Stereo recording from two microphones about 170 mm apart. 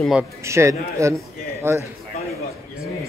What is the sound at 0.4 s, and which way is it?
A man's voice, 15° right (ahead or behind).